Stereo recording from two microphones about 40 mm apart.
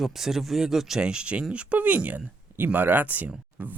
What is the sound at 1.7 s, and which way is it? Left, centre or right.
Speech, right.